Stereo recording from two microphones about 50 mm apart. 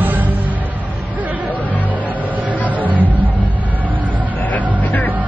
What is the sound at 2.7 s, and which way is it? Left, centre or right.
Music, right.